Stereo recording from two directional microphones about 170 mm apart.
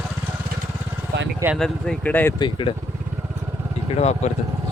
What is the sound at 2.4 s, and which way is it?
Speech, 30° left (ahead or behind).